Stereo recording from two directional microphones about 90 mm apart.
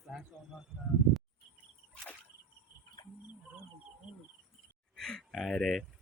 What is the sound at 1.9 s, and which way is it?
Whip, 15° left (ahead or behind).